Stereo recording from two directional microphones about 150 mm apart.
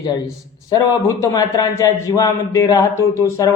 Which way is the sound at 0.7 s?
25° left (ahead or behind).